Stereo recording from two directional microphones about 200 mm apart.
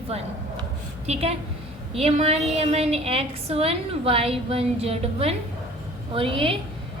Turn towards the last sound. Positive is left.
turn(degrees=-25)  # may be behind; listen again after turning